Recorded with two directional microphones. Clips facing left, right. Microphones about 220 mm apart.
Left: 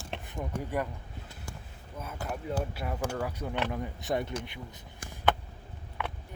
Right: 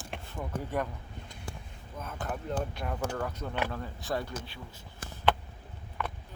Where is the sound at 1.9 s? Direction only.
10° left (ahead or behind).